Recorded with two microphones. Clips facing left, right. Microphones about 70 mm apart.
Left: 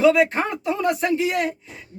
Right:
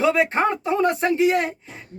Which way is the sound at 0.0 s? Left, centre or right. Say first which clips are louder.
Left 2 dB; right.